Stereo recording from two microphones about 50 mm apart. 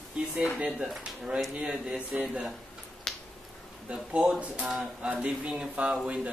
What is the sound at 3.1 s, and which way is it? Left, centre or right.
Finger snapping, centre.